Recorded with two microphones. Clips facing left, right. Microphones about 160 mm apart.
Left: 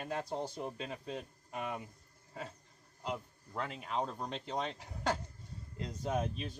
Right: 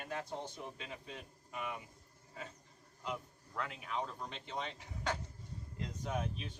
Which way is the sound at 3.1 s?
30° left (ahead or behind).